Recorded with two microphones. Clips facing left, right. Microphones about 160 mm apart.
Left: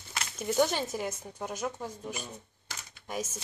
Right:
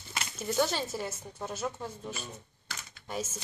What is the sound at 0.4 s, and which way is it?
Speech, 15° left (ahead or behind).